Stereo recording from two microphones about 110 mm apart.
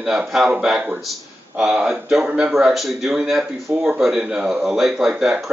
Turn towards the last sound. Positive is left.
turn(degrees=-5)  # may be behind; listen again after turning